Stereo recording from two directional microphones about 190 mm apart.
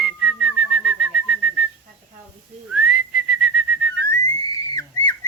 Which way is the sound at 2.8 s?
5° right (ahead or behind).